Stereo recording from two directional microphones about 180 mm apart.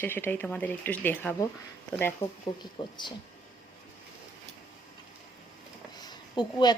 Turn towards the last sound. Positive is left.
turn(degrees=25)  # may be behind; listen again after turning